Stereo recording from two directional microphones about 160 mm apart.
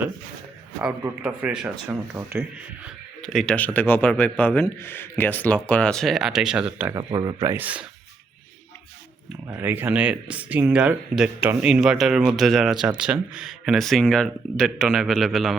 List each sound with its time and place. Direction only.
0.8 s a man's voice: 5° right (ahead or behind)
3.2 s a man's voice: 5° left (ahead or behind)
6.9 s speech: 30° right (ahead or behind); by 7.9 s 10° right (ahead or behind)
9.5 s speech: 15° right (ahead or behind)